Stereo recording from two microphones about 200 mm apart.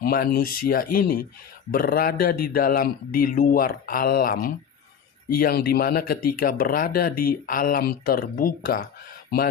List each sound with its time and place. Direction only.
0.0 s speech: 50° left (ahead or behind)